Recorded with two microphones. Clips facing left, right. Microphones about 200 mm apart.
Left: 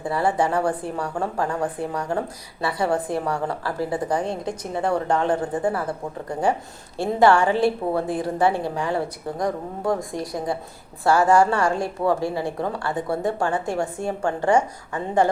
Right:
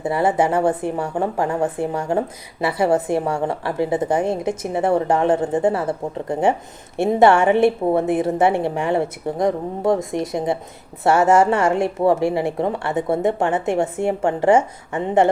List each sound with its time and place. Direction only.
0.0 s a woman's voice: 25° right (ahead or behind)